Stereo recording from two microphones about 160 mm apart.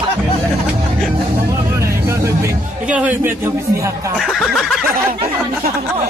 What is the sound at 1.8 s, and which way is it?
Vehicle, 20° right (ahead or behind).